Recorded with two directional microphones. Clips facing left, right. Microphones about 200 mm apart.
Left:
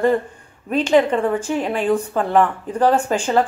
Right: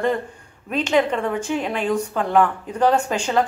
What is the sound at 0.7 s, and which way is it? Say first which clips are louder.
Speech: left 4 dB; 30° left (ahead or behind).